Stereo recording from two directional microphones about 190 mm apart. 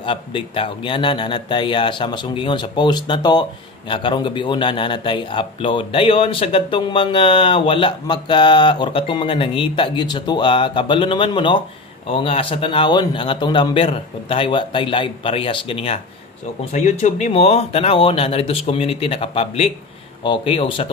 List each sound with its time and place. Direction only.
0.0 s a man's voice: 25° left (ahead or behind)